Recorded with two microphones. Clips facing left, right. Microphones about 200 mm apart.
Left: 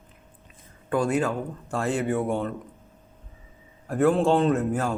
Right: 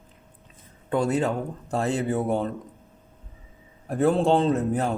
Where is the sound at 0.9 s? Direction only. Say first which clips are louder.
Even; 25° right (ahead or behind).